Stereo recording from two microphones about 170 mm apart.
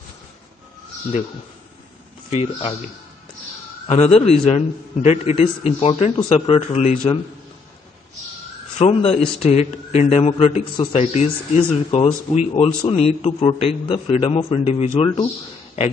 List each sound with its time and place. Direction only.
3.8 s a man's voice: 40° left (ahead or behind)
8.7 s a man's voice: 40° left (ahead or behind)